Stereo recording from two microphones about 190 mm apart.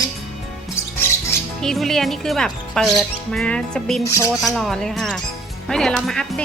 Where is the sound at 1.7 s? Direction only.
Centre (ahead or behind).